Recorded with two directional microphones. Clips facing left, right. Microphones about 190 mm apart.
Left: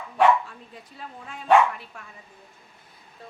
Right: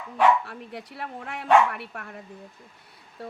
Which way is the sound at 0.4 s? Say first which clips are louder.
Right 6 dB; 75° right (ahead or behind).